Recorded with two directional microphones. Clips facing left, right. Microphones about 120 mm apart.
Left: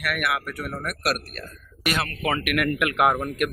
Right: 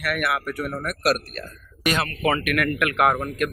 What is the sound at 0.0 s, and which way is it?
Speech, centre (ahead or behind).